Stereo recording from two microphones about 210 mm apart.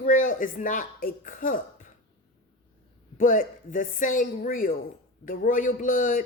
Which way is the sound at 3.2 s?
40° left (ahead or behind).